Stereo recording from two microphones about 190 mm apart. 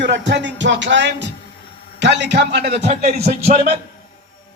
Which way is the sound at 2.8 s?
35° right (ahead or behind).